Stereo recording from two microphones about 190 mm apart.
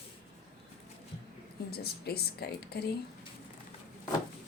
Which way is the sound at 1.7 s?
55° left (ahead or behind).